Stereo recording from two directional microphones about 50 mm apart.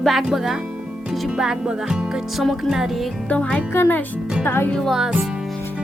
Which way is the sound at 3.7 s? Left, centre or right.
Left.